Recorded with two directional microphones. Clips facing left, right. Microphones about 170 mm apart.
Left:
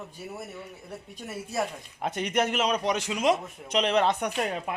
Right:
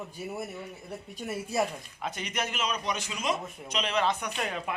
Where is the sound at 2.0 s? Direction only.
60° left (ahead or behind).